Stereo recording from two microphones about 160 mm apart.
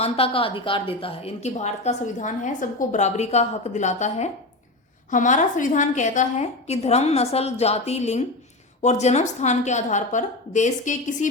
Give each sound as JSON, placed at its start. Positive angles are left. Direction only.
{"t": 0.0, "sound": "a woman's voice", "side_deg": 35}